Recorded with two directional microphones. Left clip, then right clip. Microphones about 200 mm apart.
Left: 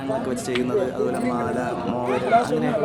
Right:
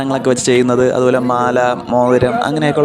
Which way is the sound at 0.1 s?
45° right (ahead or behind).